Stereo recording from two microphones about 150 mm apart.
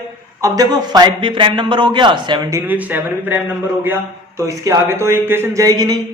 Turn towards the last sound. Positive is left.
turn(degrees=-25)  # may be behind; listen again after turning